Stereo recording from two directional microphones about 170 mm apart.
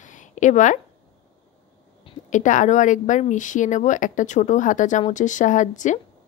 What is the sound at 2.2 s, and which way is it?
Speech, 45° left (ahead or behind).